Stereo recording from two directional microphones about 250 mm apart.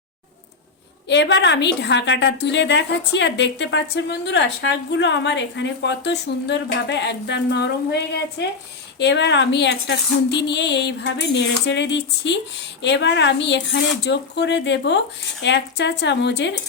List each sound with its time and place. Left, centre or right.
1.0 s a woman's voice: left